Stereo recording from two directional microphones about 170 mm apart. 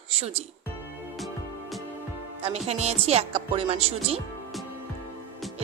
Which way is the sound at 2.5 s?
40° right (ahead or behind).